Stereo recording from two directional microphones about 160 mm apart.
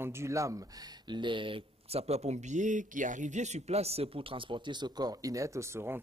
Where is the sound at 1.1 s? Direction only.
30° right (ahead or behind).